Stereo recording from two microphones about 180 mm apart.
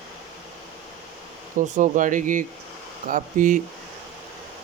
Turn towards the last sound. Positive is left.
turn(degrees=-45)  # may be behind; listen again after turning